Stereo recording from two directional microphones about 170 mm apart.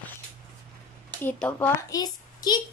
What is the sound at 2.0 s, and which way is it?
Speech, 25° left (ahead or behind).